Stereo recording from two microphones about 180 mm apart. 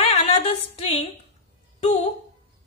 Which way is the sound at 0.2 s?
35° left (ahead or behind).